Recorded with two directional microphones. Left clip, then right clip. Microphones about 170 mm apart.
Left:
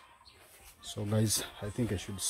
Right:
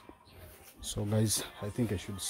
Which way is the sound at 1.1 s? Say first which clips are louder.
Left 1 dB; centre (ahead or behind).